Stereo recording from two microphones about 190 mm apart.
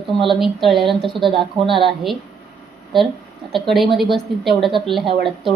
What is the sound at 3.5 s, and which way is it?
A woman's voice, centre (ahead or behind).